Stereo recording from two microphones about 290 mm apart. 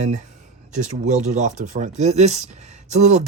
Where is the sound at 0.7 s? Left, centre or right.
Right.